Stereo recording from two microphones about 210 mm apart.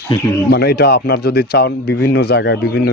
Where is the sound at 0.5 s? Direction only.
50° left (ahead or behind).